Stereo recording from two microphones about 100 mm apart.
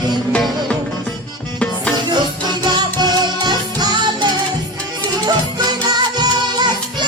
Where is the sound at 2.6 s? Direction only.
45° right (ahead or behind).